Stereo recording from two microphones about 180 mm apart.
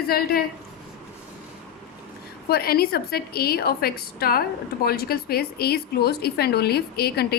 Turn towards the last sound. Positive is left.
turn(degrees=60)  # may be behind; listen again after turning